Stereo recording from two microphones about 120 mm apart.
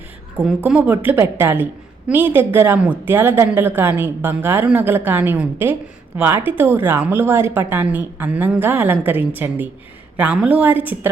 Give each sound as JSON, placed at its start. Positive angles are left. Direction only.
{"t": 0.4, "sound": "a woman's voice", "side_deg": -10}